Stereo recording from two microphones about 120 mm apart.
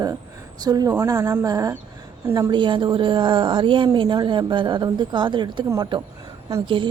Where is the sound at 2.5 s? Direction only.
40° right (ahead or behind).